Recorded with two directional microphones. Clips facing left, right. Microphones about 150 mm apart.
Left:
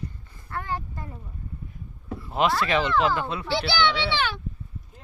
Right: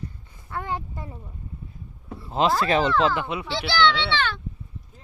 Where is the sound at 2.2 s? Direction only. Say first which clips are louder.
Right 2 dB; 25° right (ahead or behind).